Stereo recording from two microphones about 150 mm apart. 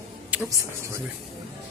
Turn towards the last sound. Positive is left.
turn(degrees=-20)  # may be behind; listen again after turning